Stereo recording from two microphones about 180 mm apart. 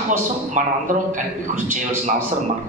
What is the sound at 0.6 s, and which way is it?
Speech, 45° right (ahead or behind).